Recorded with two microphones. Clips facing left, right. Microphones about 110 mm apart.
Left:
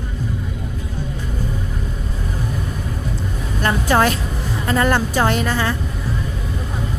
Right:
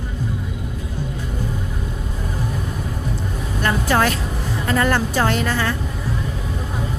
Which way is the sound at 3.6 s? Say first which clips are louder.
Left 2 dB; 25° left (ahead or behind).